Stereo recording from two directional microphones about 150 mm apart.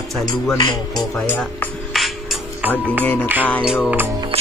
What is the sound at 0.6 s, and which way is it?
Speech, 25° left (ahead or behind).